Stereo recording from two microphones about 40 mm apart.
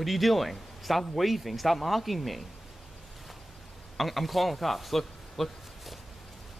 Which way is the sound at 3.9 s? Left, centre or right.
Centre.